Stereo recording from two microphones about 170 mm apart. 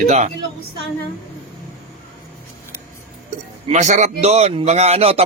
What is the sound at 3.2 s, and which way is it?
Speech, 40° right (ahead or behind).